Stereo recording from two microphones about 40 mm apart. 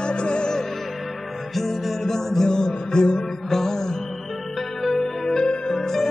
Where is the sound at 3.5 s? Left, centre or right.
Centre.